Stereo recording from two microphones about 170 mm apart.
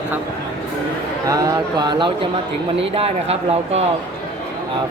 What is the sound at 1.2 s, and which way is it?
Speech, 20° right (ahead or behind).